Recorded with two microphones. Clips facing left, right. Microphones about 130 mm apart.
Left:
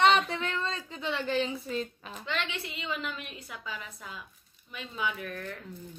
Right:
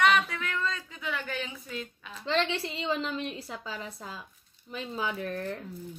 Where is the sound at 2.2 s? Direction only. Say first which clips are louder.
Right 7 dB; 30° right (ahead or behind).